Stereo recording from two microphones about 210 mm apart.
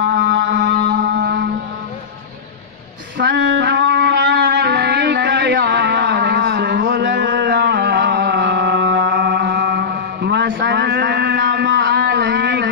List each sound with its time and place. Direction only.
0.0 s music: 60° right (ahead or behind)
3.2 s music: 55° right (ahead or behind)